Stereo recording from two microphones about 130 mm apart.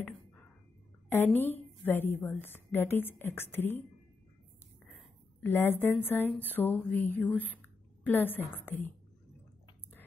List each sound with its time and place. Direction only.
1.0 s a woman's voice: 15° left (ahead or behind)
4.9 s a woman's voice: 15° left (ahead or behind)